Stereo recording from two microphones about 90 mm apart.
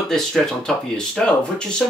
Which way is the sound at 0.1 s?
5° left (ahead or behind).